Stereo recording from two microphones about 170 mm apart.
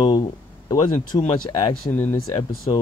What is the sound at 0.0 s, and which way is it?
Speech, 25° left (ahead or behind).